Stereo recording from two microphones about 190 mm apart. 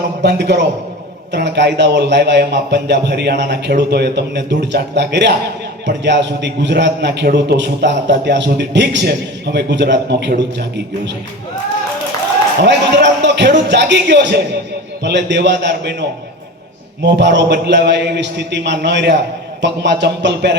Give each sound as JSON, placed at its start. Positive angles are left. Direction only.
{"t": 0.2, "sound": "a man's voice", "side_deg": -65}
{"t": 12.6, "sound": "a man's voice", "side_deg": -65}